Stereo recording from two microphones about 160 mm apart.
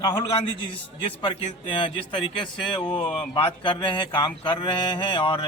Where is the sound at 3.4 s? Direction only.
30° left (ahead or behind).